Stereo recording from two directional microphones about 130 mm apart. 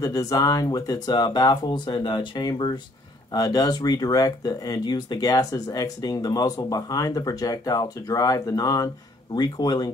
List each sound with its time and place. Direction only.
0.0 s speech: 25° left (ahead or behind)